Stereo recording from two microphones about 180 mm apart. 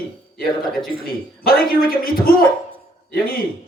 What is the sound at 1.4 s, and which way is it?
Speech, 55° left (ahead or behind).